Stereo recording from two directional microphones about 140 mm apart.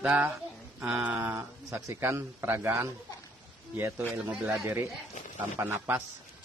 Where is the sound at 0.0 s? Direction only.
10° right (ahead or behind).